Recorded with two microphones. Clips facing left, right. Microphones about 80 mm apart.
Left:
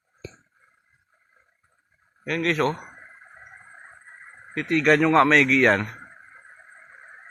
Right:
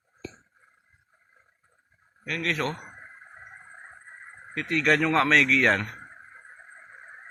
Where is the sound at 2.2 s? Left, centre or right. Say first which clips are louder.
Left 6 dB; left.